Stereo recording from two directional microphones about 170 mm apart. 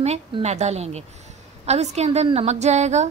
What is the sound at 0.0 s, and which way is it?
A woman's voice, 40° right (ahead or behind).